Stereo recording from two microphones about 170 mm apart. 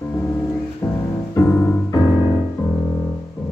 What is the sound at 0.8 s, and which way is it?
Music, 20° left (ahead or behind).